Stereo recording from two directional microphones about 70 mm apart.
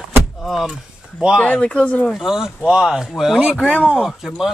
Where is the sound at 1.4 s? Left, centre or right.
Centre.